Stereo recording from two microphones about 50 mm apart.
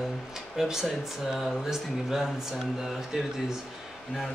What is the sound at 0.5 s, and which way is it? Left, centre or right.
Speech, centre.